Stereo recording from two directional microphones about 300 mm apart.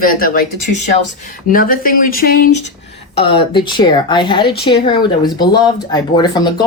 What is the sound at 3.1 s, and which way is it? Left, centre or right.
Speech, centre.